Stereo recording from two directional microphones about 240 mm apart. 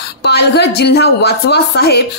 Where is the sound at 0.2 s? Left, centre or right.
Left.